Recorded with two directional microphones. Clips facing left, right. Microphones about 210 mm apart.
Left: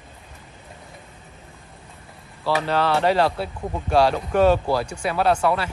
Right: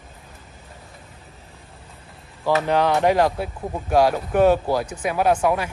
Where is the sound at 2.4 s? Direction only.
15° right (ahead or behind).